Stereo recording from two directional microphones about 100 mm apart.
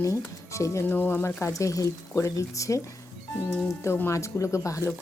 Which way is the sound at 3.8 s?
25° left (ahead or behind).